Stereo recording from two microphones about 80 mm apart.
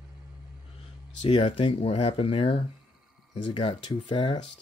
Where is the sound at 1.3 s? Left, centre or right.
Left.